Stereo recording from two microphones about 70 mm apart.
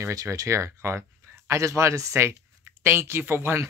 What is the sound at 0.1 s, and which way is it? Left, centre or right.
Speech, right.